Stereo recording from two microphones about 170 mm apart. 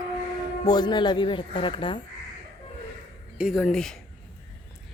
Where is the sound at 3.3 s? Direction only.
Centre (ahead or behind).